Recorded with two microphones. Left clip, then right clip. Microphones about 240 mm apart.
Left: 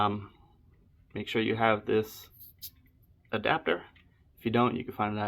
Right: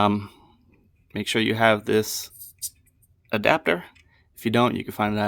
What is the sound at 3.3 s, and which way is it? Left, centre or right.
Speech, right.